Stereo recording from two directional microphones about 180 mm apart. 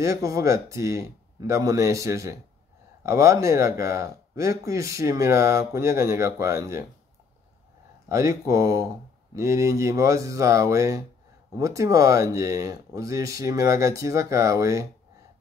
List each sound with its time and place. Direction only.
0.0 s speech: 15° right (ahead or behind)
8.1 s speech: 15° right (ahead or behind)